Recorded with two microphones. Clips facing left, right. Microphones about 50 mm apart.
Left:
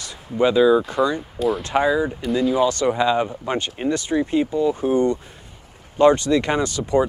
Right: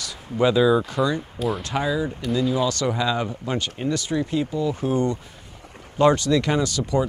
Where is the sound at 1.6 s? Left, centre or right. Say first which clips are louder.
Left 5 dB; left.